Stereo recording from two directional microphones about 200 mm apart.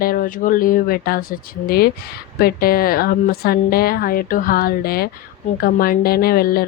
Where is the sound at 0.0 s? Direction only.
45° left (ahead or behind).